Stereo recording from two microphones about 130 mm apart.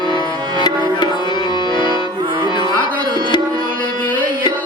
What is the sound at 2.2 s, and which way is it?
Music, 30° right (ahead or behind).